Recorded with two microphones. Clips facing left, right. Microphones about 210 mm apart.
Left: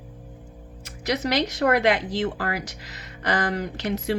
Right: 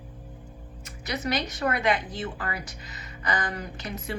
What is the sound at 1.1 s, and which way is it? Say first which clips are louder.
Speech: left 5 dB; 80° left.